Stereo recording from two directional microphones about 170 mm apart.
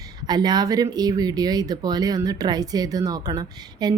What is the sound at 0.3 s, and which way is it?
Speech, 25° right (ahead or behind).